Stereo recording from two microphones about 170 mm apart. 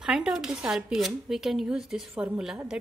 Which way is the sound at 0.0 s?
5° right (ahead or behind).